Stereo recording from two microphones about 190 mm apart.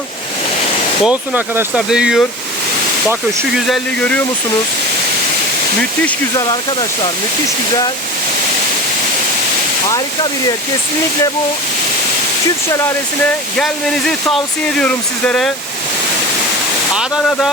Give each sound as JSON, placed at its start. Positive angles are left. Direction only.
{"t": 1.0, "sound": "speech", "side_deg": -5}
{"t": 3.7, "sound": "speech", "side_deg": 5}
{"t": 6.3, "sound": "speech", "side_deg": 25}
{"t": 13.6, "sound": "speech", "side_deg": 5}
{"t": 16.9, "sound": "speech", "side_deg": 0}